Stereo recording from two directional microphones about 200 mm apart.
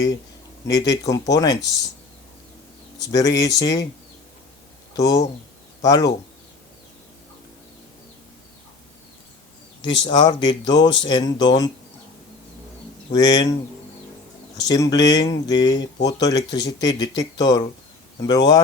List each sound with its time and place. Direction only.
0.7 s speech: 20° left (ahead or behind)
3.0 s speech: 20° left (ahead or behind)
4.9 s speech: 20° left (ahead or behind)
10.0 s speech: 20° left (ahead or behind)
13.1 s speech: 20° left (ahead or behind)
14.6 s speech: 20° left (ahead or behind)